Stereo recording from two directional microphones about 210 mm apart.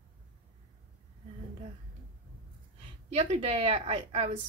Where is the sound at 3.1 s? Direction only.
30° right (ahead or behind).